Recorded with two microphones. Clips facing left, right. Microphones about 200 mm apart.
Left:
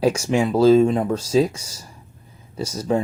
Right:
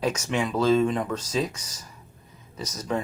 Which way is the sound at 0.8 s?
25° left (ahead or behind).